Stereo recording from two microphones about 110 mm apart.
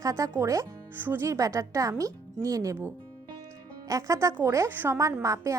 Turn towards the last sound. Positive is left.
turn(degrees=-30)  # may be behind; listen again after turning